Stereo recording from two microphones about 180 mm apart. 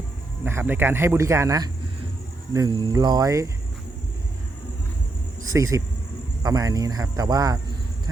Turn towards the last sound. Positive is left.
turn(degrees=-20)  # may be behind; listen again after turning